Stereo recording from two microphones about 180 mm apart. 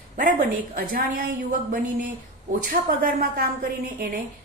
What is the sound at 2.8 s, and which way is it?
Speech, 55° right (ahead or behind).